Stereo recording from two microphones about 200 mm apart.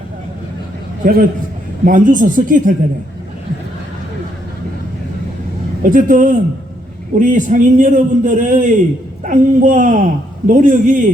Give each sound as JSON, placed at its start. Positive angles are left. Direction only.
{"t": 1.0, "sound": "speech", "side_deg": -45}
{"t": 5.8, "sound": "a man's voice", "side_deg": -40}